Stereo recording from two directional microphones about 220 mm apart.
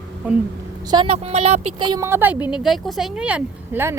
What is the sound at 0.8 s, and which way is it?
Speech, 20° right (ahead or behind).